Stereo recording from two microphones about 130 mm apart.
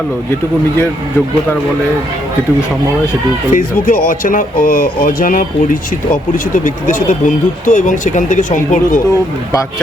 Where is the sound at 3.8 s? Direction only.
90° left.